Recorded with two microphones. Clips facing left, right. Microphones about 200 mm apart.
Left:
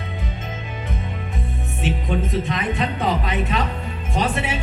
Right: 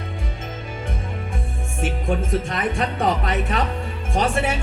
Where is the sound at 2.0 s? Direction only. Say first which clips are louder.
Right 2 dB; 50° right (ahead or behind).